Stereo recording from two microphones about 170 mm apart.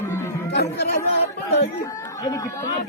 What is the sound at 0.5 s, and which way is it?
Speech, 75° left (ahead or behind).